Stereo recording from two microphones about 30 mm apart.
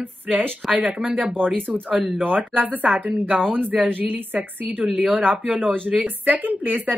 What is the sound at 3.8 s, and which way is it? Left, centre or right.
Speech, right.